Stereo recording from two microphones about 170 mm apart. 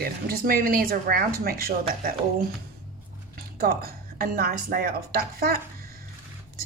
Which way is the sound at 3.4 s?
60° right (ahead or behind).